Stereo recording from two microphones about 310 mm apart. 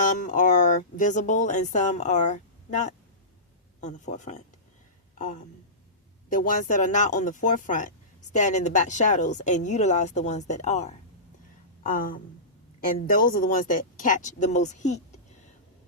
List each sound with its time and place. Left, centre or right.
0.0 s speech: left
5.1 s a sound: left
6.2 s speech: left